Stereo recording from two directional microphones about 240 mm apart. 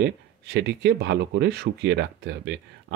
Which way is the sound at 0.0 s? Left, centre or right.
Right.